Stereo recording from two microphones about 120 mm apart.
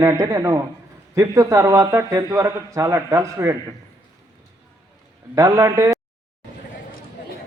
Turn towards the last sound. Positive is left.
turn(degrees=-30)  # may be behind; listen again after turning